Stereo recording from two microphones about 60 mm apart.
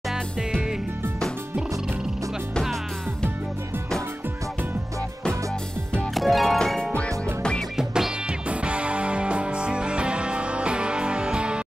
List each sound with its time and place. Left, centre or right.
6.1 s music: centre
7.7 s music: centre